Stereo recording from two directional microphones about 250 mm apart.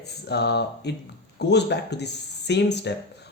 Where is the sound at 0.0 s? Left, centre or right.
Left.